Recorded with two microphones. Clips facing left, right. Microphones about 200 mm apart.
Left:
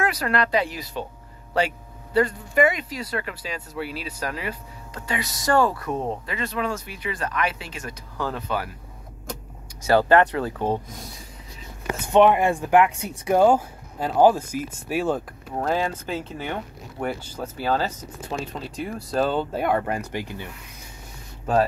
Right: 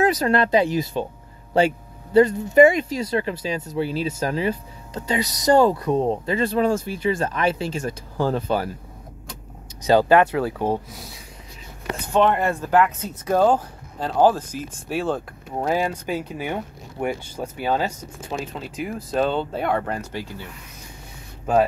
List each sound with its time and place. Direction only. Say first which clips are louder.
0.0 s speech: right 5 dB; 20° right (ahead or behind)
2.1 s speech: right 7 dB; 25° right (ahead or behind)
5.9 s speech: right 7 dB; 30° right (ahead or behind)
9.8 s speech: right 2 dB; 15° right (ahead or behind)
12.1 s speech: left 3 dB; 15° left (ahead or behind)
15.5 s speech: right 2 dB; 10° right (ahead or behind)
18.3 s speech: right 1 dB; 5° right (ahead or behind); by 20.4 s 15° left (ahead or behind)